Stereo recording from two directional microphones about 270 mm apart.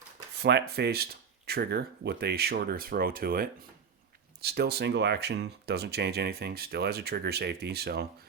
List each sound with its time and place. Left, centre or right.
0.3 s speech: right